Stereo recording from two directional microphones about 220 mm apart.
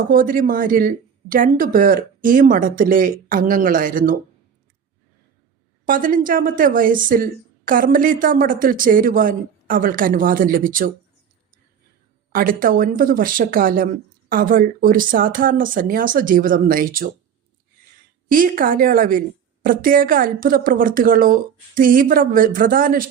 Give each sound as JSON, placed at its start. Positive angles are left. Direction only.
{"t": 0.1, "sound": "speech", "side_deg": -40}
{"t": 5.8, "sound": "speech", "side_deg": -40}
{"t": 12.3, "sound": "speech", "side_deg": -40}
{"t": 18.3, "sound": "speech", "side_deg": -40}